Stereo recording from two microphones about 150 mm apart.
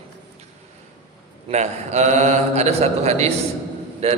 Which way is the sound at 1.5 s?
50° right (ahead or behind).